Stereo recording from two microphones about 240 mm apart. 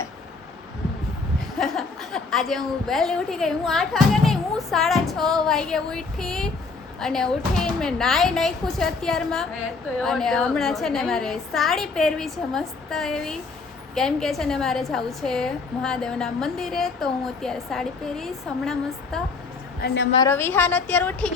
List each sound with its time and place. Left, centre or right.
1.4 s a woman's voice: centre
19.8 s a woman's voice: left
20.2 s a woman's voice: centre